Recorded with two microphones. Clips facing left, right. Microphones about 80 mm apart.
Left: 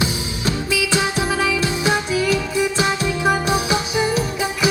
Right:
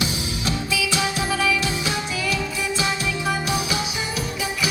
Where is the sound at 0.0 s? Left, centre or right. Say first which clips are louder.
Left 3 dB; left.